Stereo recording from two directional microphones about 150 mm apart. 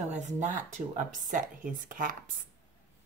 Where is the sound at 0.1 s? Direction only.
50° right (ahead or behind).